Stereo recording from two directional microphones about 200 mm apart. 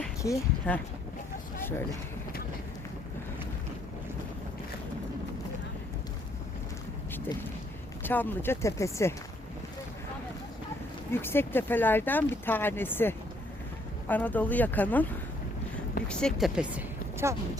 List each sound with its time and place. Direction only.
0.2 s speech: 10° left (ahead or behind)
8.0 s speech: 10° left (ahead or behind)
11.1 s speech: 10° left (ahead or behind)
16.0 s speech: 5° left (ahead or behind); by 17.6 s 15° right (ahead or behind)